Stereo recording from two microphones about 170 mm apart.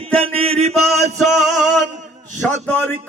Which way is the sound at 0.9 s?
40° right (ahead or behind).